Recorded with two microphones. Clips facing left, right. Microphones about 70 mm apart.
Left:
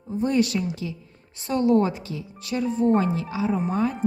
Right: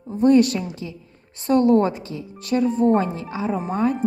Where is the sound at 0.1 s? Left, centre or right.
Right.